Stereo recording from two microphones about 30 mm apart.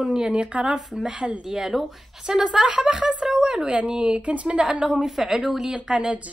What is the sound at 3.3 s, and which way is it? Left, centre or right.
Speech, right.